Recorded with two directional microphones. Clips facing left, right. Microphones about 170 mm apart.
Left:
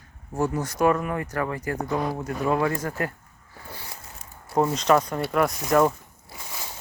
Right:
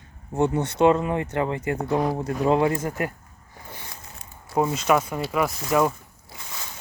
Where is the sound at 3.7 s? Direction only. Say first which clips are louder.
Left 1 dB; 20° right (ahead or behind).